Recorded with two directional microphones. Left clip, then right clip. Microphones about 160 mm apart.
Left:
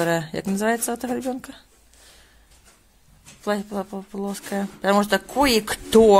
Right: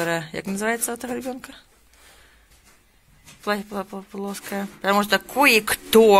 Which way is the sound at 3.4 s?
20° left (ahead or behind).